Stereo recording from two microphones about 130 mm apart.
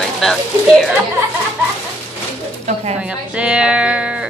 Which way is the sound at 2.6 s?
55° right (ahead or behind).